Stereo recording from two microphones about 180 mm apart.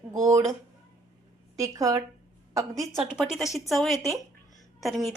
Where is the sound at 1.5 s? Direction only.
20° right (ahead or behind).